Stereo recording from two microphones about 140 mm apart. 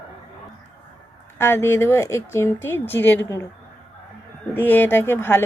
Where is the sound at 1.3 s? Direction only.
15° left (ahead or behind).